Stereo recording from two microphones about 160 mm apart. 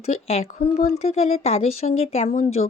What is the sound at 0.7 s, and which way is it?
Speech, 45° left (ahead or behind).